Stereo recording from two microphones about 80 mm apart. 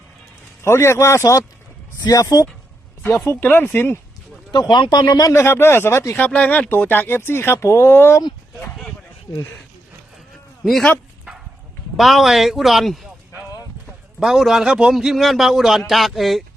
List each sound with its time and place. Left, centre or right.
0.6 s speech: left
3.5 s speech: left
4.7 s speech: left
5.2 s speech: left
6.2 s speech: centre
10.6 s speech: centre
11.9 s a man's voice: centre